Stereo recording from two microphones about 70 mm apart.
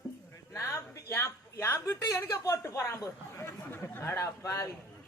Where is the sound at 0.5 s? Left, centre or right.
Left.